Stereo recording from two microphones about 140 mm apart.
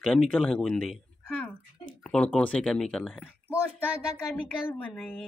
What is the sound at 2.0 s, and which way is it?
Speech, 5° left (ahead or behind).